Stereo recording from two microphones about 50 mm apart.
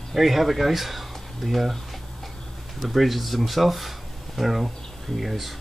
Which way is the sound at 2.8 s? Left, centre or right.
Centre.